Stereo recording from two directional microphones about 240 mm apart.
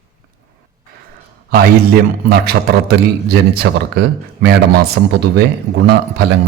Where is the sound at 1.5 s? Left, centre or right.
Right.